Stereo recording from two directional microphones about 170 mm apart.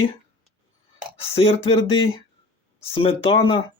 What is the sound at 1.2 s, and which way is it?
Speech, 35° left (ahead or behind).